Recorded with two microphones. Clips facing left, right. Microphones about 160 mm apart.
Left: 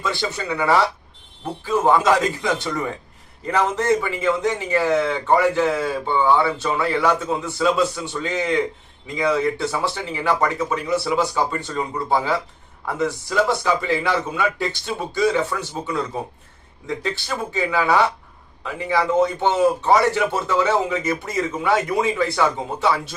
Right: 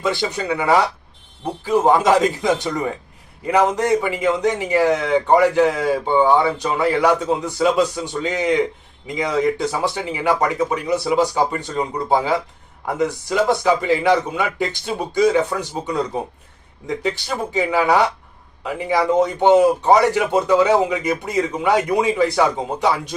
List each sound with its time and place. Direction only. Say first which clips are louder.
0.0 s a man's voice: right 4 dB; 20° right (ahead or behind)